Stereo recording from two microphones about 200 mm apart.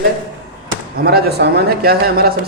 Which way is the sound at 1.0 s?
50° right (ahead or behind).